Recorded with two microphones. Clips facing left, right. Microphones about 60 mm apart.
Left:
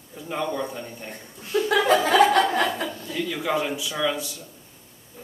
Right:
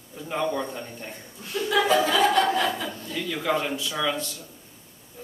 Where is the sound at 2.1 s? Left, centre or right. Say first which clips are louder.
Left 3 dB; left.